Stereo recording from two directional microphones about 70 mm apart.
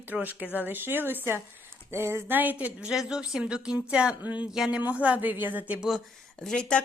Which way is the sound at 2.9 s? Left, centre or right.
Centre.